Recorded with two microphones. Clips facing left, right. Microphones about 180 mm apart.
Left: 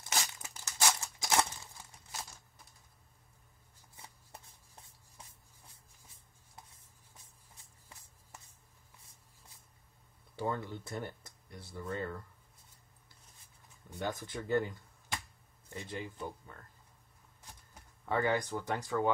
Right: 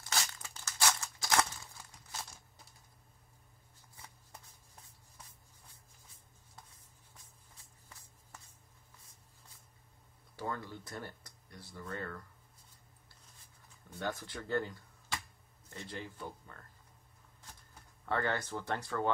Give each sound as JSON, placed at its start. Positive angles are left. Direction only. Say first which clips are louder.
{"t": 0.1, "sound": "crumpling", "louder": "left 1 dB", "side_deg": 20}
{"t": 3.9, "sound": "shuffling cards", "louder": "left 2 dB", "side_deg": 30}
{"t": 10.3, "sound": "speech", "louder": "left 4 dB", "side_deg": 25}
{"t": 13.8, "sound": "speech", "louder": "left 1 dB", "side_deg": 15}
{"t": 15.7, "sound": "speech", "louder": "left 3 dB", "side_deg": 15}
{"t": 18.0, "sound": "speech", "louder": "left 3 dB", "side_deg": 15}